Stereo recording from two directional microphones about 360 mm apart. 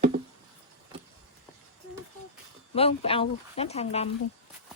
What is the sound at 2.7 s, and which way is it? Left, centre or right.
Speech, centre.